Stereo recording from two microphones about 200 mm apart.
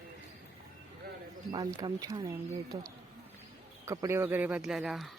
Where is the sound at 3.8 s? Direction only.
15° right (ahead or behind); by 5.1 s centre (ahead or behind).